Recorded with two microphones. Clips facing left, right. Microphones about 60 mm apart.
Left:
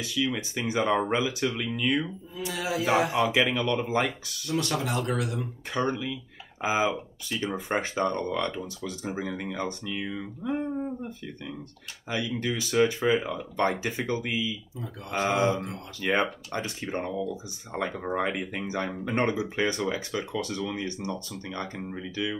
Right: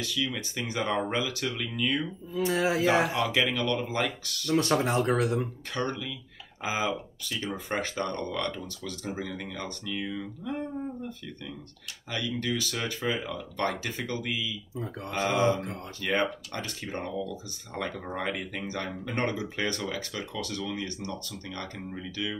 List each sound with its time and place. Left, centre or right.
0.0 s speech: left
2.4 s speech: right
3.1 s speech: centre
4.6 s speech: right
5.8 s speech: centre
12.1 s speech: centre